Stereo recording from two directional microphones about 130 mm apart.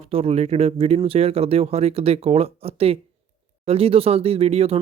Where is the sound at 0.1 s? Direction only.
50° right (ahead or behind).